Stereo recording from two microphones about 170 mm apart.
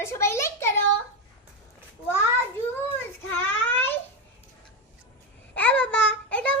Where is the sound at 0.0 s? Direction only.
15° left (ahead or behind).